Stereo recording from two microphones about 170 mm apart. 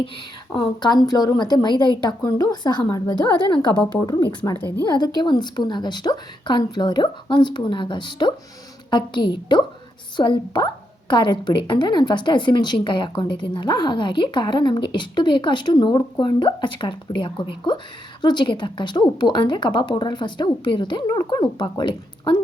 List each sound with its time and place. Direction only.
0.5 s a woman's voice: 25° left (ahead or behind)